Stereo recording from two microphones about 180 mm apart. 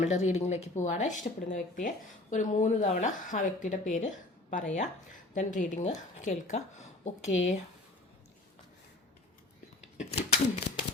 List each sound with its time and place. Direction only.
0.0 s a woman's voice: 40° left (ahead or behind)
10.0 s speech: 40° left (ahead or behind)